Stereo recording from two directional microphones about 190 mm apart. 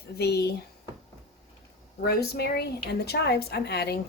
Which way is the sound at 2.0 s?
55° left (ahead or behind).